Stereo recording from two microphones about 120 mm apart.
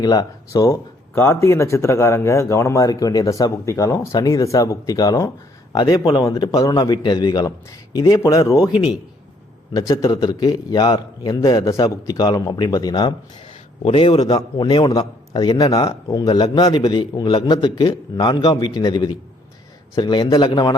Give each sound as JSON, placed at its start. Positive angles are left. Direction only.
{"t": 0.0, "sound": "a man's voice", "side_deg": 30}
{"t": 9.7, "sound": "a man's voice", "side_deg": 30}
{"t": 13.8, "sound": "a man's voice", "side_deg": 50}